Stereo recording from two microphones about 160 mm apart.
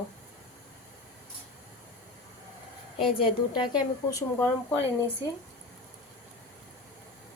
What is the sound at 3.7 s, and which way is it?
Speech, 20° left (ahead or behind).